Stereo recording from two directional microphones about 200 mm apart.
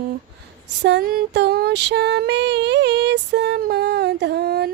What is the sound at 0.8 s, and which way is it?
Female singing, 55° right (ahead or behind).